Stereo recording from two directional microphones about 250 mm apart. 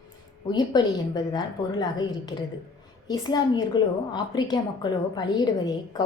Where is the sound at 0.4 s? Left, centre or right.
Centre.